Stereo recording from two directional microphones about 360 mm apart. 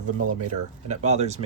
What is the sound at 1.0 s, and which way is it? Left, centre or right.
Speech, centre.